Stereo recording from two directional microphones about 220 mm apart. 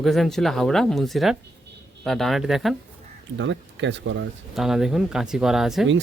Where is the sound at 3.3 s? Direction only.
55° right (ahead or behind).